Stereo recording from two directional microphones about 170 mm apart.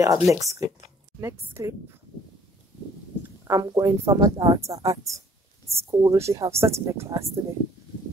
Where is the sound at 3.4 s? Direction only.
20° right (ahead or behind).